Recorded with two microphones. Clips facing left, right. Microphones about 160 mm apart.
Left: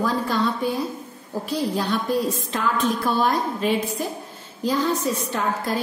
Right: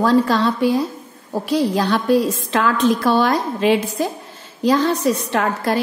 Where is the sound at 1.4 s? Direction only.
80° right.